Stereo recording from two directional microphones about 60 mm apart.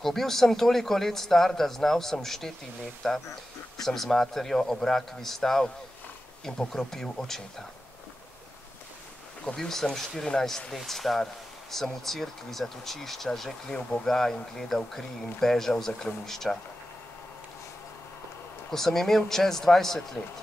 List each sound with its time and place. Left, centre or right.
0.0 s a man's voice: centre
9.5 s a man's voice: centre
18.7 s speech: centre